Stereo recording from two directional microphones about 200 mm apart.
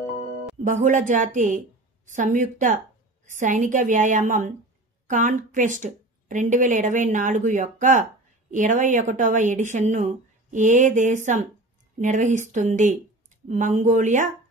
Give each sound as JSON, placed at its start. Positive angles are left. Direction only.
{"t": 0.7, "sound": "a woman's voice", "side_deg": -40}